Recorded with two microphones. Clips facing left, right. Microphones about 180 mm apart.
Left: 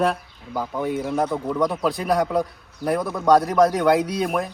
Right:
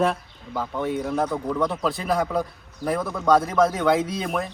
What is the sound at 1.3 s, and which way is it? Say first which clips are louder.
Speech: left 2 dB; 15° left (ahead or behind).